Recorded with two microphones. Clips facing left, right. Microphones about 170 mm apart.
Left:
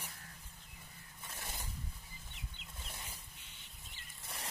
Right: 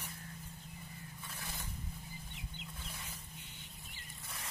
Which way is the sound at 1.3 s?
20° left (ahead or behind).